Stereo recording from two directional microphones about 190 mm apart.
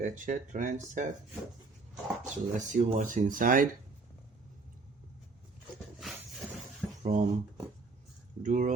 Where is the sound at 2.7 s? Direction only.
40° right (ahead or behind).